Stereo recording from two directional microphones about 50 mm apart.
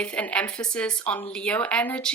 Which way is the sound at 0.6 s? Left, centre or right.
Centre.